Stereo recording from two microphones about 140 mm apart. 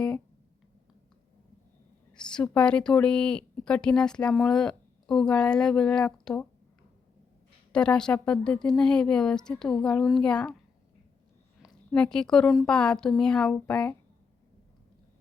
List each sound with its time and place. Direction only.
2.1 s speech: 5° left (ahead or behind)
7.7 s speech: 5° left (ahead or behind)
11.6 s a woman's voice: 5° left (ahead or behind)